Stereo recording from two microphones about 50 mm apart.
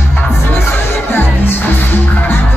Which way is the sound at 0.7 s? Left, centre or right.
Left.